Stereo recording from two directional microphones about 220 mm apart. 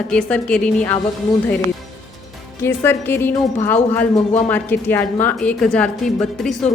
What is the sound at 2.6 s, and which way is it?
A woman's voice, 10° left (ahead or behind).